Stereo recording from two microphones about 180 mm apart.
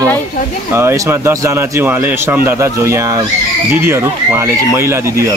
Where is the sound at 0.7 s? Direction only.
15° right (ahead or behind).